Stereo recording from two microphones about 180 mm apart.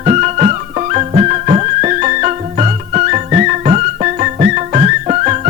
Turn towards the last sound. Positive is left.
turn(degrees=-35)  # may be behind; listen again after turning